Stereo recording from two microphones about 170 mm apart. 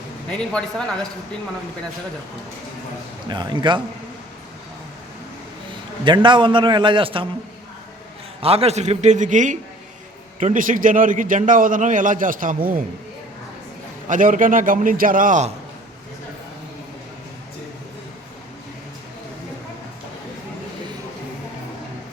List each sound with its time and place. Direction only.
0.3 s a man's voice: 5° left (ahead or behind)
3.2 s a man's voice: 25° right (ahead or behind)
6.1 s a man's voice: 30° right (ahead or behind)
8.4 s a man's voice: 35° right (ahead or behind); by 12.5 s 50° right (ahead or behind)
14.1 s a man's voice: 50° right (ahead or behind)